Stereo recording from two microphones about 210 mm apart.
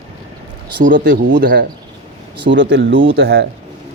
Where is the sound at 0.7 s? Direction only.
40° right (ahead or behind).